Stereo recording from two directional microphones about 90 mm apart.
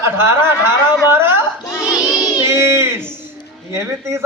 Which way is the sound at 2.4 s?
30° right (ahead or behind).